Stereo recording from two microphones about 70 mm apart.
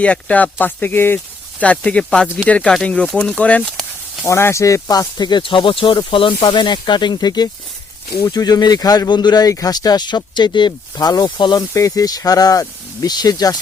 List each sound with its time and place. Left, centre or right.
0.0 s speech: centre
4.3 s speech: left
4.6 s speech: left
8.3 s speech: left
11.7 s speech: left